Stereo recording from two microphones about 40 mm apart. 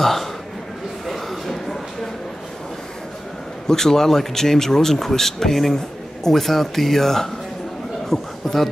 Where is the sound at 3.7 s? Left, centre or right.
Centre.